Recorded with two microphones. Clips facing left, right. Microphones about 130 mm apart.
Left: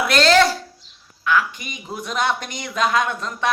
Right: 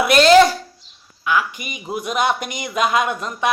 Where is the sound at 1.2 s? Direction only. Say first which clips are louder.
Even; 10° right (ahead or behind).